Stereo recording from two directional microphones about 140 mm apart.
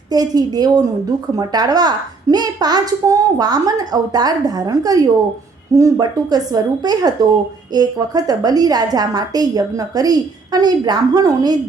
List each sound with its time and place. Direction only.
0.1 s a woman's voice: 30° right (ahead or behind)